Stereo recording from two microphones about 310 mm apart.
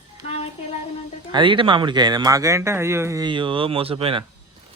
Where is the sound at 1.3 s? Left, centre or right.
Centre.